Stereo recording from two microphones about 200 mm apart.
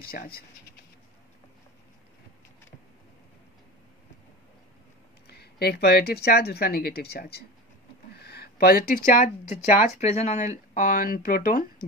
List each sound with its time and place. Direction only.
0.0 s speech: 50° left (ahead or behind)
5.2 s speech: 55° left (ahead or behind)